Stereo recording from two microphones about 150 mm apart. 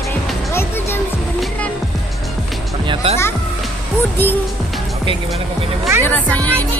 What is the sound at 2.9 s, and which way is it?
Music, 35° right (ahead or behind).